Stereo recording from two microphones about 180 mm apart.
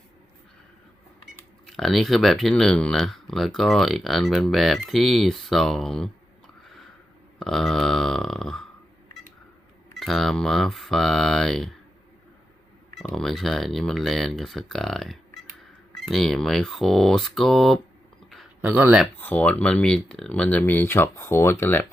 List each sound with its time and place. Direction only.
1.2 s speech: centre (ahead or behind)
7.3 s speech: centre (ahead or behind)
10.0 s speech: centre (ahead or behind)
13.0 s speech: centre (ahead or behind)
18.3 s a sound: 5° right (ahead or behind)
19.1 s speech: 10° left (ahead or behind)